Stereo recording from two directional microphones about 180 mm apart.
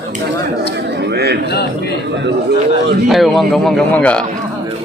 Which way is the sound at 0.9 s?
65° right (ahead or behind).